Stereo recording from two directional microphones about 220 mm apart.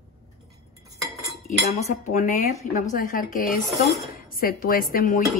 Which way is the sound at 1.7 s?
30° left (ahead or behind).